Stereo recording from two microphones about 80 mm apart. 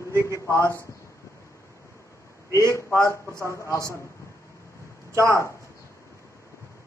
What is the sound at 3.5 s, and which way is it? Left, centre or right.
Speech, left.